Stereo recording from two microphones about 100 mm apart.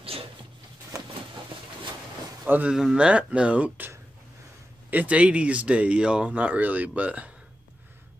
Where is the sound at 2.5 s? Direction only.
15° right (ahead or behind).